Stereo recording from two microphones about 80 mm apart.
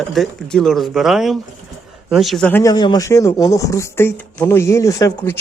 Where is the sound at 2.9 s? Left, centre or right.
Left.